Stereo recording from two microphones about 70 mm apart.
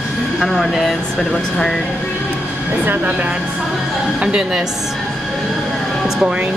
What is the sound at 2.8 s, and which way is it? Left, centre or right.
Speech, right.